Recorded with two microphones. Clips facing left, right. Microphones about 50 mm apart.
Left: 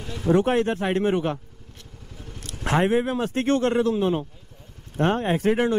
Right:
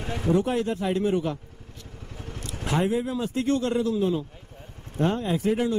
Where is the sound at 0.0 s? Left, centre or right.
Right.